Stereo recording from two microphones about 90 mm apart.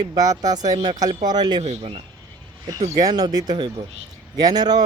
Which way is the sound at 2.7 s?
45° right (ahead or behind).